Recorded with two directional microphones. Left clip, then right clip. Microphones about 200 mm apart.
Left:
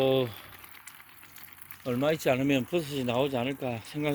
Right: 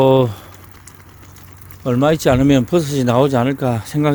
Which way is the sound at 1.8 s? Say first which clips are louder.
Right 12 dB; 15° right (ahead or behind).